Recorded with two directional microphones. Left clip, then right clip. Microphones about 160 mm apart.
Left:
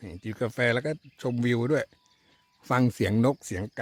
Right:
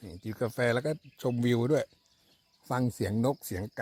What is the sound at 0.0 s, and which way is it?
Speech, 20° left (ahead or behind).